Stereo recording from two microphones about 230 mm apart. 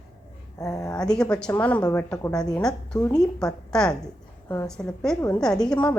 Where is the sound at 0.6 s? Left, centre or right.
Centre.